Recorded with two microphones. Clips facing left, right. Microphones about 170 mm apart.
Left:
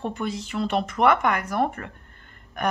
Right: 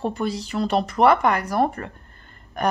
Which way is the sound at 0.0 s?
35° right (ahead or behind).